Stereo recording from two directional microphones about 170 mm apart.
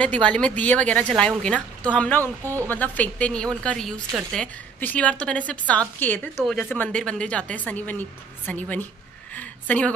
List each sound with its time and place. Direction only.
0.0 s a woman's voice: 10° left (ahead or behind)
2.4 s speech: 15° right (ahead or behind)
2.7 s a woman's voice: 10° left (ahead or behind)
6.3 s speech: centre (ahead or behind)
6.6 s a woman's voice: 10° left (ahead or behind)